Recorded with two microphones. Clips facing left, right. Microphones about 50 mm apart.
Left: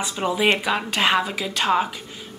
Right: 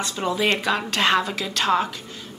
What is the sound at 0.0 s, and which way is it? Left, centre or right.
A woman's voice, centre.